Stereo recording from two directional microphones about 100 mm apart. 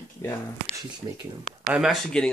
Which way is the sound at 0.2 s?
30° left (ahead or behind).